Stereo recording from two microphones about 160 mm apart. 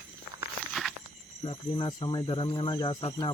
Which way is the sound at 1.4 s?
30° left (ahead or behind).